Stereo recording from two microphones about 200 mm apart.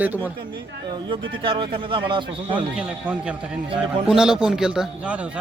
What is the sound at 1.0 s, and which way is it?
A man's voice, 25° right (ahead or behind).